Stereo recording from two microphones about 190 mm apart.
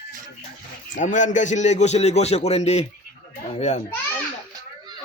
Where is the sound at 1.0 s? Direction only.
40° left (ahead or behind).